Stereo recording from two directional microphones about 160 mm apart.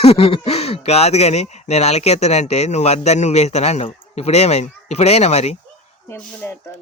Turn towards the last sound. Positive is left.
turn(degrees=15)  # may be behind; listen again after turning